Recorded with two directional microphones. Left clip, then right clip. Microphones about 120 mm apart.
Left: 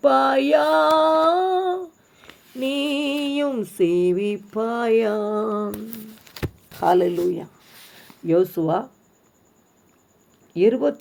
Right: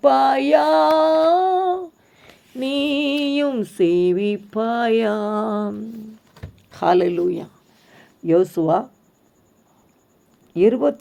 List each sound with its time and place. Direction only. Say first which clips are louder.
0.0 s a sound: right 2 dB; 25° right (ahead or behind)
5.3 s speech: right 1 dB; 20° right (ahead or behind)
6.7 s speech: right 1 dB; 45° right (ahead or behind)
8.3 s speech: right 3 dB; 25° right (ahead or behind)
10.6 s speech: right 2 dB; 30° right (ahead or behind)